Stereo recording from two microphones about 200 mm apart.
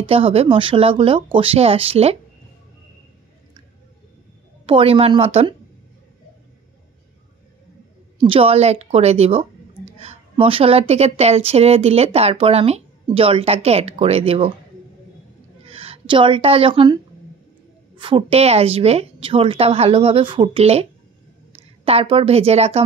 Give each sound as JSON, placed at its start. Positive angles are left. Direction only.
{"t": 0.0, "sound": "a woman's voice", "side_deg": -30}
{"t": 4.6, "sound": "a woman's voice", "side_deg": -25}
{"t": 8.2, "sound": "a woman's voice", "side_deg": -25}
{"t": 15.6, "sound": "a woman's voice", "side_deg": -30}